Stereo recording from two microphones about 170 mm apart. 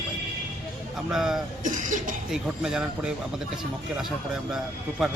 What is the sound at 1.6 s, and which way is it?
Speech, 50° right (ahead or behind).